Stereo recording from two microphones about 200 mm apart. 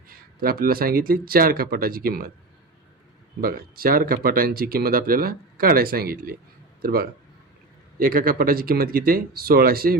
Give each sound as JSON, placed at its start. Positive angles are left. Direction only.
{"t": 0.1, "sound": "speech", "side_deg": -45}
{"t": 3.4, "sound": "speech", "side_deg": -45}